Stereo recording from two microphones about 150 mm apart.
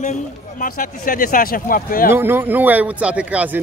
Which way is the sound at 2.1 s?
15° right (ahead or behind).